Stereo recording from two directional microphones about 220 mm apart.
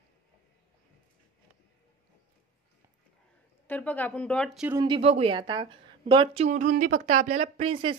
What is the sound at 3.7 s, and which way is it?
Speech, 10° left (ahead or behind).